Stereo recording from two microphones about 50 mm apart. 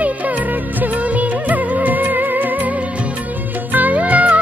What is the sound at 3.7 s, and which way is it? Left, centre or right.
Music, right.